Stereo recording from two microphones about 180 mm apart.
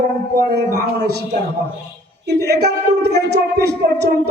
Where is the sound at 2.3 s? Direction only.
65° right (ahead or behind).